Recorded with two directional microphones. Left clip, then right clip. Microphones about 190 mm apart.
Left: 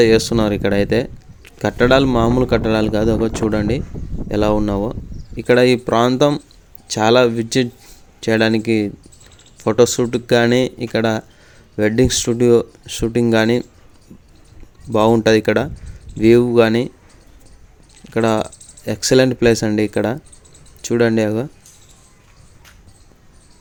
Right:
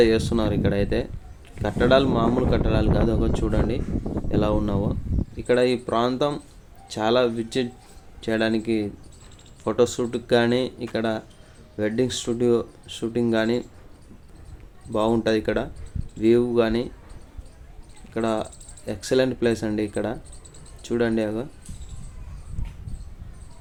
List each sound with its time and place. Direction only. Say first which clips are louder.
0.0 s speech: left 7 dB; 45° left (ahead or behind)
14.9 s speech: left 9 dB; 50° left (ahead or behind)
18.1 s speech: left 8 dB; 50° left (ahead or behind)